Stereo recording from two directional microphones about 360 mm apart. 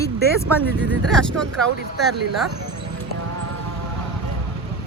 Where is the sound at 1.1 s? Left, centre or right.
Centre.